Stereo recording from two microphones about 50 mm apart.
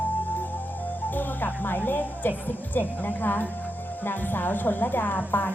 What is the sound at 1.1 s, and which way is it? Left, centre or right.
A woman's voice, left.